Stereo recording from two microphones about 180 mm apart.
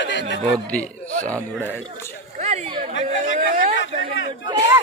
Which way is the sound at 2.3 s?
40° right (ahead or behind).